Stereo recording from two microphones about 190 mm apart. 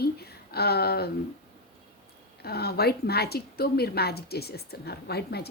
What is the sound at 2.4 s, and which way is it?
Speech, 55° left (ahead or behind).